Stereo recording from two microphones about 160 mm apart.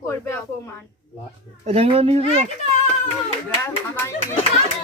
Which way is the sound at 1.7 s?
40° right (ahead or behind).